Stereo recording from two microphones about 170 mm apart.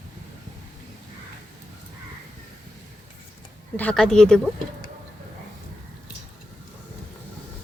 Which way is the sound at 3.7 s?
10° left (ahead or behind).